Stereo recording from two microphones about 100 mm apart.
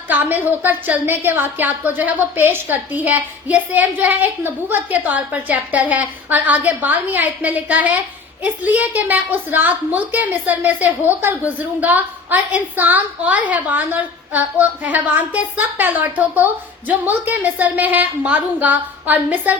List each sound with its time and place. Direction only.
0.1 s a woman's voice: 20° right (ahead or behind)